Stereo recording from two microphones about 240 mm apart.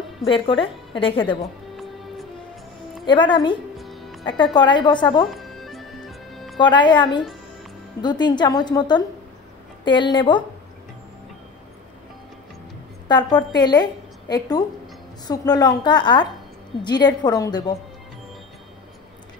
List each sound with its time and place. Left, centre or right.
0.2 s a woman's voice: left
3.1 s a woman's voice: centre
3.7 s music: centre
4.6 s a woman's voice: centre
5.3 s music: centre
6.6 s a woman's voice: centre
13.1 s a woman's voice: centre
15.2 s a woman's voice: centre